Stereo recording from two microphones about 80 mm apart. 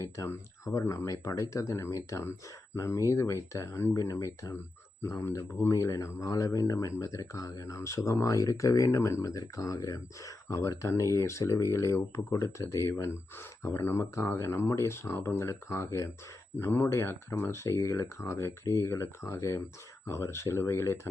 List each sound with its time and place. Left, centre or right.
0.0 s speech: left